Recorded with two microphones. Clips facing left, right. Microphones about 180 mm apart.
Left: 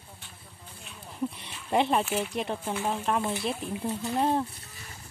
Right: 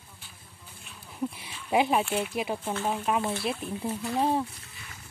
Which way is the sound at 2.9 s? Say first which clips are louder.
Right 1 dB; 5° right (ahead or behind).